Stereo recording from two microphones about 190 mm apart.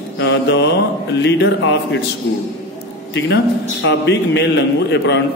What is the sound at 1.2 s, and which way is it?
Mantra, 65° left (ahead or behind).